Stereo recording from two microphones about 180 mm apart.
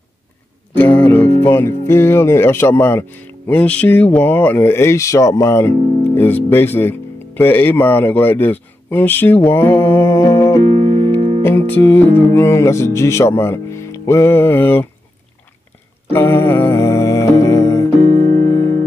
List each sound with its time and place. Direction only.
0.7 s music: 10° left (ahead or behind)
1.9 s speech: 15° left (ahead or behind)
10.8 s music: 30° right (ahead or behind)
11.4 s speech: 10° left (ahead or behind)
16.1 s music: 10° left (ahead or behind)
18.0 s music: 40° right (ahead or behind)